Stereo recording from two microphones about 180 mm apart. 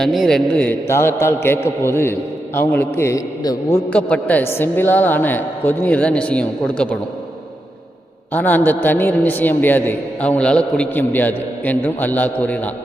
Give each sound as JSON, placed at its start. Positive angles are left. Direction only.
{"t": 0.0, "sound": "a man's voice", "side_deg": 0}
{"t": 3.8, "sound": "a man's voice", "side_deg": 5}
{"t": 8.3, "sound": "a man's voice", "side_deg": 10}